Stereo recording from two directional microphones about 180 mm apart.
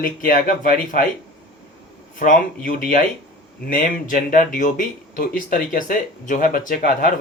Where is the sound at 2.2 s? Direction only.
50° left (ahead or behind).